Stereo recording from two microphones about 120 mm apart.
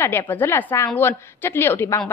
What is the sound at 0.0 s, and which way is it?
A woman's voice, 20° left (ahead or behind).